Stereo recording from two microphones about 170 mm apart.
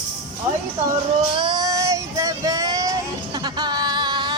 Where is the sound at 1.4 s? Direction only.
25° right (ahead or behind).